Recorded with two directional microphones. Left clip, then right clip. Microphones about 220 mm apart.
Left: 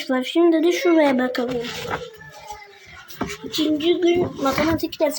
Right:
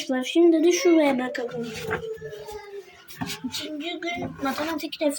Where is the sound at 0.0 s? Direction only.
5° left (ahead or behind).